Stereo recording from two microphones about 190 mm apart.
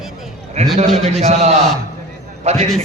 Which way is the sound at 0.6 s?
35° right (ahead or behind).